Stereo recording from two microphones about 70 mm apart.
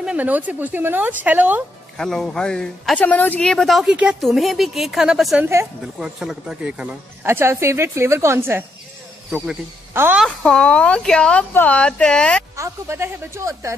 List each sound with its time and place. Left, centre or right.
0.0 s a woman's voice: right
2.0 s a man's voice: centre
3.0 s a woman's voice: left
3.4 s a woman's voice: centre
3.9 s speech: centre
4.2 s a woman's voice: centre
7.2 s a woman's voice: right
9.9 s a woman's voice: right
10.4 s a man's voice: centre
12.5 s speech: right